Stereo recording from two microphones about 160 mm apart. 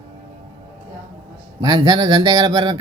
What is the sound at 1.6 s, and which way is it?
Speech, 25° right (ahead or behind).